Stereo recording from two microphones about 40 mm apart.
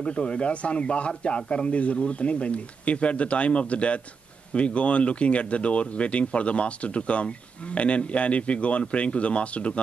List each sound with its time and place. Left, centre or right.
0.0 s speech: left